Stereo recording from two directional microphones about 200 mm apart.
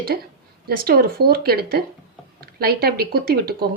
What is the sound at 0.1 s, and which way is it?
Speech, 50° right (ahead or behind).